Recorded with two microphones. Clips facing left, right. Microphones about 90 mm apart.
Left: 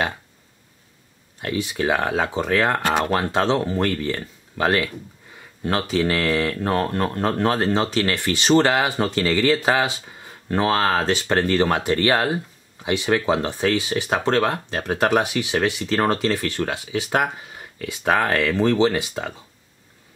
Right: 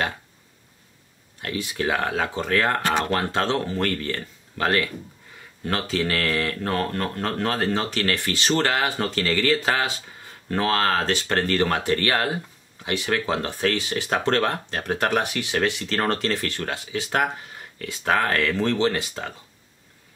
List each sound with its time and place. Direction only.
1.4 s speech: 20° left (ahead or behind)